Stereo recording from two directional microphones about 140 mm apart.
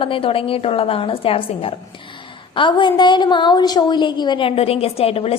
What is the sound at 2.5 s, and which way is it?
A woman's voice, 35° left (ahead or behind).